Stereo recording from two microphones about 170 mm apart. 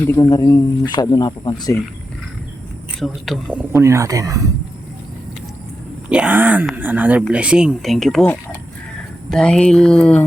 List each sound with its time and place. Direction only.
0.0 s speech: 15° left (ahead or behind)
3.0 s speech: centre (ahead or behind)
3.7 s speech: 15° right (ahead or behind)
6.1 s speech: 10° right (ahead or behind)
9.3 s speech: 5° left (ahead or behind)